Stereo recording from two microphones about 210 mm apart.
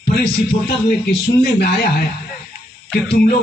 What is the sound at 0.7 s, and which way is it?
A man's voice, 50° left (ahead or behind).